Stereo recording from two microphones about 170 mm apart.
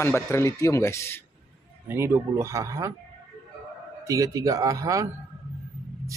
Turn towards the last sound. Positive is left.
turn(degrees=-20)  # may be behind; listen again after turning